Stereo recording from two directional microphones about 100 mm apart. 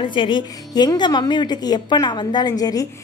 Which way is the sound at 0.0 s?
55° left (ahead or behind).